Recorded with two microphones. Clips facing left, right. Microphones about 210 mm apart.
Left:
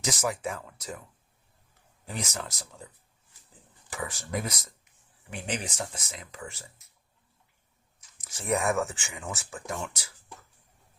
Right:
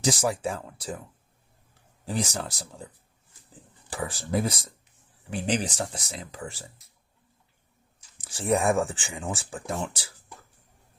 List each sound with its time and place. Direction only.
0.0 s speech: 30° right (ahead or behind)
2.0 s speech: 30° right (ahead or behind)
3.8 s speech: 30° right (ahead or behind)
8.0 s speech: 30° right (ahead or behind)